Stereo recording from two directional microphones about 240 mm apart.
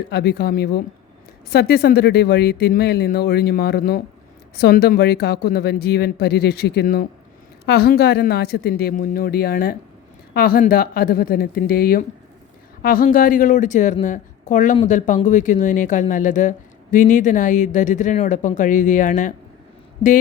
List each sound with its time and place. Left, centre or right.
0.1 s speech: left